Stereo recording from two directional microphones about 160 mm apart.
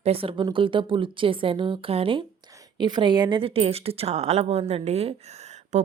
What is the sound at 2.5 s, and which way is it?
A woman's voice, 25° right (ahead or behind).